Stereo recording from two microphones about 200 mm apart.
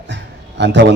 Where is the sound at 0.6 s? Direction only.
60° right (ahead or behind).